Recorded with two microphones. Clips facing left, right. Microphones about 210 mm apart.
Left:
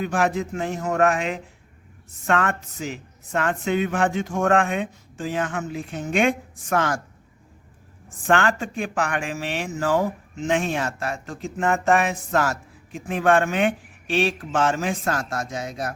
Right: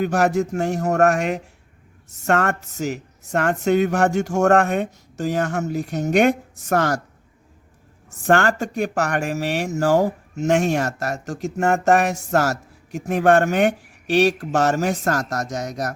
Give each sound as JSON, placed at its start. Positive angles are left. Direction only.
{"t": 0.0, "sound": "speech", "side_deg": -45}
{"t": 8.2, "sound": "a woman's voice", "side_deg": -45}